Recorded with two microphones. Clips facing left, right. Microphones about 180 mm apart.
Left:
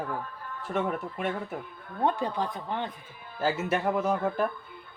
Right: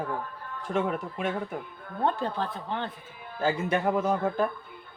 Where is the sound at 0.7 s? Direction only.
Centre (ahead or behind).